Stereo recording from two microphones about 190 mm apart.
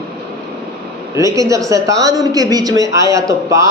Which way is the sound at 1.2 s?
15° right (ahead or behind).